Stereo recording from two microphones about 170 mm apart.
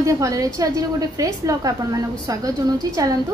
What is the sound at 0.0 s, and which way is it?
A woman's voice, 20° right (ahead or behind).